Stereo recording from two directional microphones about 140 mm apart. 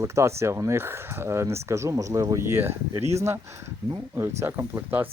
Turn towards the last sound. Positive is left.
turn(degrees=-15)  # may be behind; listen again after turning